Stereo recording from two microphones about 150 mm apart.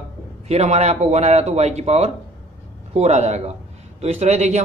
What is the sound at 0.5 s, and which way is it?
A man's voice, 45° right (ahead or behind).